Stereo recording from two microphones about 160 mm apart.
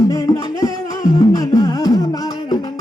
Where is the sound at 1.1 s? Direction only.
25° left (ahead or behind).